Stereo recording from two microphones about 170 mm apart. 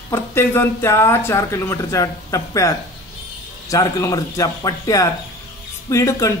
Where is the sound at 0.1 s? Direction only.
15° left (ahead or behind).